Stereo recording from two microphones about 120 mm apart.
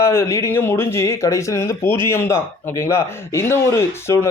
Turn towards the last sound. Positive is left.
turn(degrees=20)  # may be behind; listen again after turning